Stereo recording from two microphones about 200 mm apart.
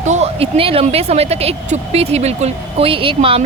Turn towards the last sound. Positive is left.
turn(degrees=-25)  # may be behind; listen again after turning